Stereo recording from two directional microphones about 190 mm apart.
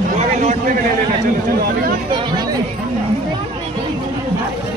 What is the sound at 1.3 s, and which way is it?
Speech, 50° right (ahead or behind).